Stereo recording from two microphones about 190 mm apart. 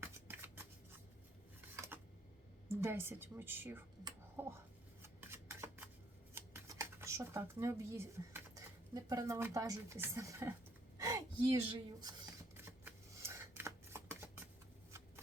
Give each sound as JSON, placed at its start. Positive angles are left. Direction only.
{"t": 0.0, "sound": "scissors", "side_deg": -10}
{"t": 2.6, "sound": "a woman's voice", "side_deg": -10}
{"t": 4.0, "sound": "whispering", "side_deg": -15}
{"t": 5.0, "sound": "a sound", "side_deg": -15}
{"t": 6.3, "sound": "speech", "side_deg": -15}
{"t": 10.9, "sound": "a sound", "side_deg": -20}
{"t": 11.7, "sound": "shuffling cards", "side_deg": -20}